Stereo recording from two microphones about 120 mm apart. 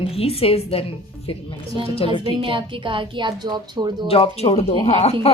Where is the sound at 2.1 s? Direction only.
45° right (ahead or behind).